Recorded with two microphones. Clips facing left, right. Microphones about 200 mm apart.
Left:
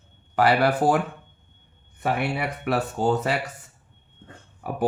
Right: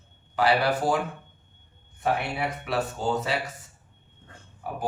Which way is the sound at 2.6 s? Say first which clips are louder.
Left 6 dB; 55° left (ahead or behind).